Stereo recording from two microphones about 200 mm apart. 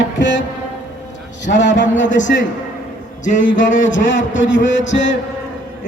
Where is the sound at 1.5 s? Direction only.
65° left (ahead or behind).